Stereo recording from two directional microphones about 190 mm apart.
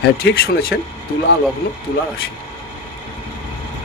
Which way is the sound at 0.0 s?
55° left (ahead or behind).